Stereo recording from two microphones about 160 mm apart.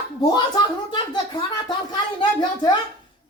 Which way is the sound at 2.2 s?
30° left (ahead or behind).